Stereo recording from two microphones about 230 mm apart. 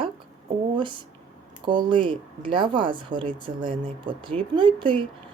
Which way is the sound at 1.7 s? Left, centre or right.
Right.